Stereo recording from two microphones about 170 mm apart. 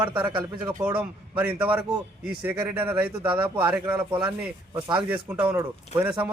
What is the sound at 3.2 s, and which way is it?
Speech, 30° right (ahead or behind).